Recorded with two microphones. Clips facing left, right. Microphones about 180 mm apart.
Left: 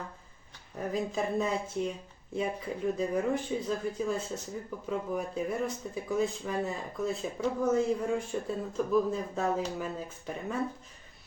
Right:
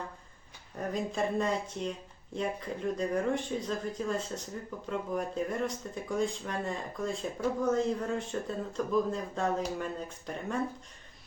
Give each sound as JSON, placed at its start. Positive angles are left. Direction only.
{"t": 0.8, "sound": "speech", "side_deg": 5}